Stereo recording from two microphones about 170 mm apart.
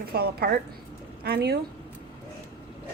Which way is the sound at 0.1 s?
65° right (ahead or behind).